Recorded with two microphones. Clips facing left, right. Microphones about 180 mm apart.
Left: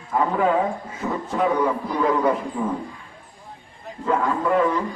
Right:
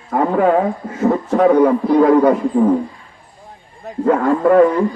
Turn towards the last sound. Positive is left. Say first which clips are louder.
# right 9 dB
turn(degrees=-50)  # may be behind; listen again after turning